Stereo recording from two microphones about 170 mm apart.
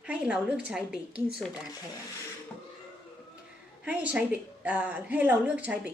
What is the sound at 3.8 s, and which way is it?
A woman's voice, 10° right (ahead or behind).